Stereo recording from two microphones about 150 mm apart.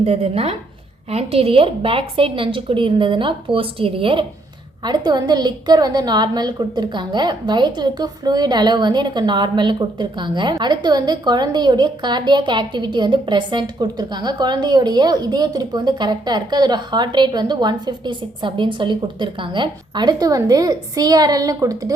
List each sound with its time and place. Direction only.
0.0 s a woman's voice: 40° right (ahead or behind); by 21.9 s 25° right (ahead or behind)